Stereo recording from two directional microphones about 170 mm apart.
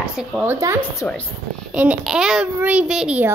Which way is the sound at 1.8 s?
5° right (ahead or behind).